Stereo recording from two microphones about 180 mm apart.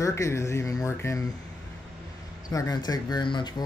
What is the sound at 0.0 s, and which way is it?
Speech, 15° left (ahead or behind).